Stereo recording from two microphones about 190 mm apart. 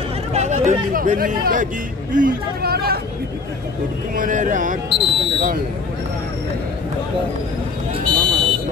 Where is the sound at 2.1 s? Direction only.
50° right (ahead or behind).